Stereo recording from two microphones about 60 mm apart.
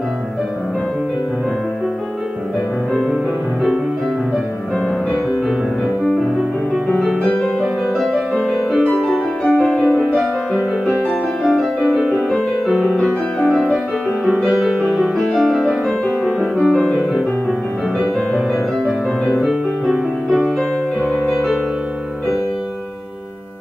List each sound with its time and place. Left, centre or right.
2.9 s music: centre
7.0 s music: centre
8.1 s music: centre
8.7 s music: centre
9.5 s music: centre
9.9 s music: centre
13.5 s music: centre
21.1 s music: centre